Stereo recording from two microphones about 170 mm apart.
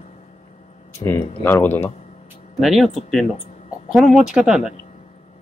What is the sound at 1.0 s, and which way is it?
Speech, 15° left (ahead or behind).